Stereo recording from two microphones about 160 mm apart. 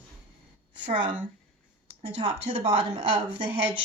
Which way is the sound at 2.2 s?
30° right (ahead or behind).